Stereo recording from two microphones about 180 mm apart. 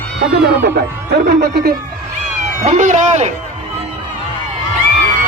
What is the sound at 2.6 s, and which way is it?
Speech, 40° right (ahead or behind).